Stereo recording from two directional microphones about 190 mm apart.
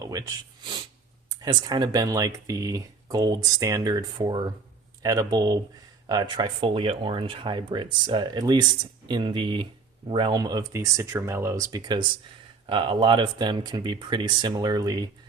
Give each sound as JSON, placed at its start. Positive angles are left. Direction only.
{"t": 0.0, "sound": "speech", "side_deg": -20}